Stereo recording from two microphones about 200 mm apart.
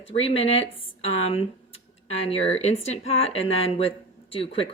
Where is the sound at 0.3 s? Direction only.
30° left (ahead or behind).